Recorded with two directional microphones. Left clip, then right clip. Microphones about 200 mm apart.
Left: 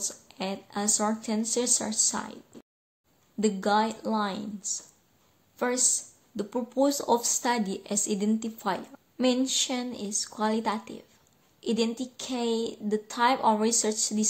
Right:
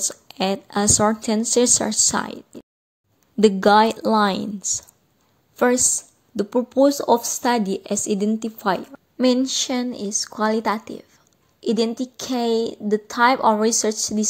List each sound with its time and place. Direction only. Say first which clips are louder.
0.0 s speech: right 10 dB; 40° right (ahead or behind)